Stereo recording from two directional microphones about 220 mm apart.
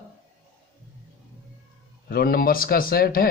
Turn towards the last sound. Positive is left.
turn(degrees=40)  # may be behind; listen again after turning